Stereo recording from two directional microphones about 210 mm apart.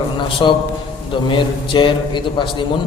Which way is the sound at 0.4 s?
20° left (ahead or behind).